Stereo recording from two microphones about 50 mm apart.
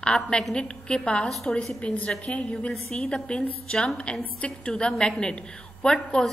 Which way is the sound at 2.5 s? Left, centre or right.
Centre.